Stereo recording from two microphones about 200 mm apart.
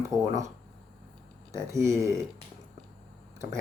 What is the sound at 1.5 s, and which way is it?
Speech, 15° right (ahead or behind).